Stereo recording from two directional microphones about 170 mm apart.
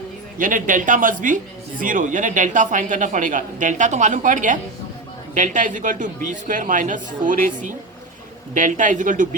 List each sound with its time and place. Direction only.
0.3 s speech: 50° right (ahead or behind)